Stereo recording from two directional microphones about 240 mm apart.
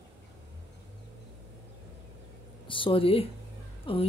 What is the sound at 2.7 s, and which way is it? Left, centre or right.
A woman's voice, left.